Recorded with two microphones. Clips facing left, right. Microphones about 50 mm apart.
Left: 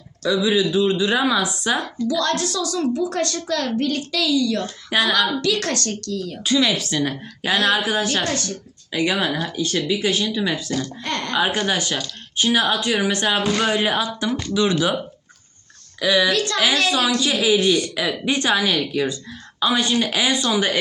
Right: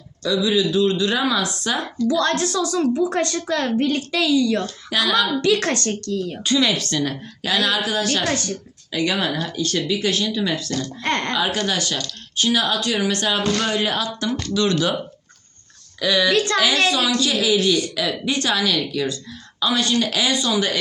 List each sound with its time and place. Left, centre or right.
0.3 s speech: centre
2.0 s a woman's voice: right
4.6 s speech: left
5.4 s a woman's voice: right
6.4 s a woman's voice: centre
7.4 s speech: left
8.3 s a woman's voice: right
8.9 s speech: centre
11.0 s speech: right
11.3 s speech: centre
11.9 s speech: centre
16.0 s speech: centre
16.3 s a woman's voice: right
17.2 s speech: centre